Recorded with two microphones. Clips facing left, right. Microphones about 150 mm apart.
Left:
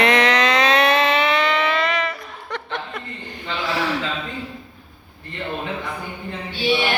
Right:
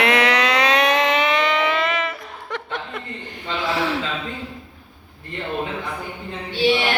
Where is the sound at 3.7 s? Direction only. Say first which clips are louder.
Right 1 dB; 25° right (ahead or behind).